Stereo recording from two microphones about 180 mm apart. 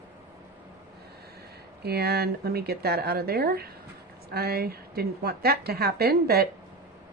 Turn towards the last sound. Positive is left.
turn(degrees=-60)  # may be behind; listen again after turning